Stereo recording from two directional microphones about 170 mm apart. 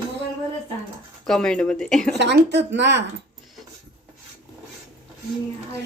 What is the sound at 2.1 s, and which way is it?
Speech, 90° right.